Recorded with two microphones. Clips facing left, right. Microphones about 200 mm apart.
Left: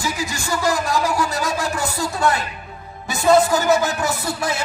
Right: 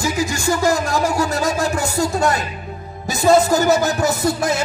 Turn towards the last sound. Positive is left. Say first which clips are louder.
# right 5 dB
turn(degrees=-45)  # may be behind; listen again after turning